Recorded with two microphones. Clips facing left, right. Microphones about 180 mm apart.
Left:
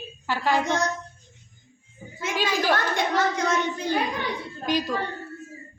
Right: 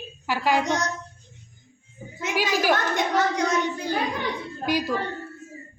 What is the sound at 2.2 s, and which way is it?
A child's voice, 15° right (ahead or behind).